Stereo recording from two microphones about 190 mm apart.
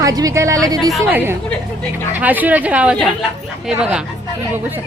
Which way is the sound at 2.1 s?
10° right (ahead or behind).